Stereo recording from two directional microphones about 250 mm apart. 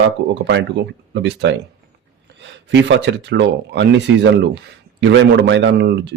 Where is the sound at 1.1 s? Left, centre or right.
Right.